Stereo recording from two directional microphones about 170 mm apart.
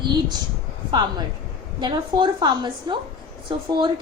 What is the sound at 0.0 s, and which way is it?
Speech, 25° right (ahead or behind).